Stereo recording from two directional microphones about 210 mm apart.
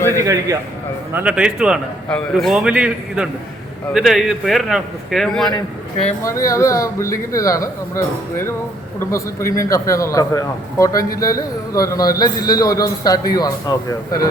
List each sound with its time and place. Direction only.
0.2 s a man's voice: 15° right (ahead or behind); by 5.5 s centre (ahead or behind)
6.1 s a man's voice: 15° left (ahead or behind)